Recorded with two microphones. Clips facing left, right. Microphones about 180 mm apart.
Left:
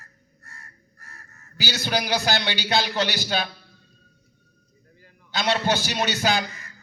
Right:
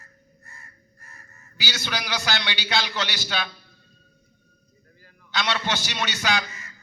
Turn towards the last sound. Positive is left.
turn(degrees=40)  # may be behind; listen again after turning